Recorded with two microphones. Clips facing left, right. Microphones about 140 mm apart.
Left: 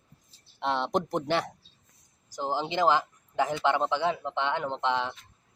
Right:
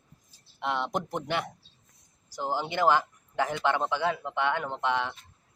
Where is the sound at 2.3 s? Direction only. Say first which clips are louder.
Left 1 dB; 20° left (ahead or behind).